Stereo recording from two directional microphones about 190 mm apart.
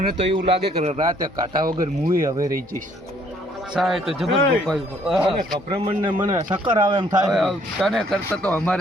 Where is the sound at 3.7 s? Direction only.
Centre (ahead or behind).